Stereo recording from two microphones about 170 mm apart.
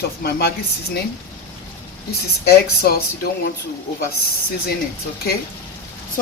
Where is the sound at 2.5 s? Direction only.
65° left (ahead or behind).